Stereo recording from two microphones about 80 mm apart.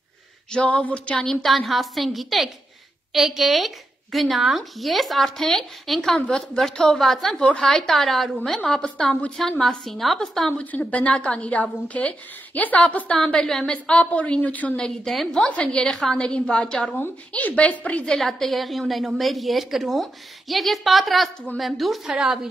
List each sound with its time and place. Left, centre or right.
0.5 s a woman's voice: centre
10.6 s a woman's voice: centre
15.0 s a woman's voice: centre